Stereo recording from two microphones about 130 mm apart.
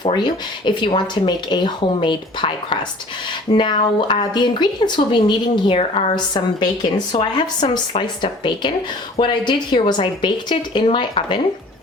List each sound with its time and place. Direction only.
0.0 s speech: 35° left (ahead or behind)
6.1 s speech: 35° left (ahead or behind)